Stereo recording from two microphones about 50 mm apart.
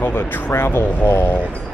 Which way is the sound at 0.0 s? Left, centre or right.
Left.